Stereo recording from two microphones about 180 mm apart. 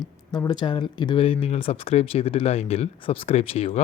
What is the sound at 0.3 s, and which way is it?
Speech, 25° left (ahead or behind).